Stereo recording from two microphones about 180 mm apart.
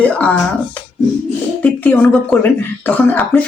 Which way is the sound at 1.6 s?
10° left (ahead or behind).